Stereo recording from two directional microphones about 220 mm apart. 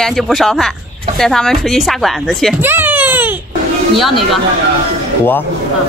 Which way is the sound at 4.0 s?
Centre (ahead or behind).